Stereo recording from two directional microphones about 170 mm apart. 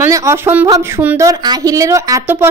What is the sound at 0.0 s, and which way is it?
A woman's voice, 15° right (ahead or behind).